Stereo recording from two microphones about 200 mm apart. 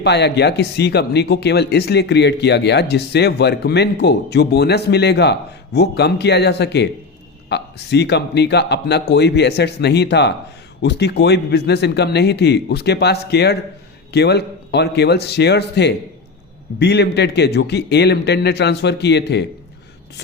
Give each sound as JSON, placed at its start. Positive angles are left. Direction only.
{"t": 0.0, "sound": "speech", "side_deg": 60}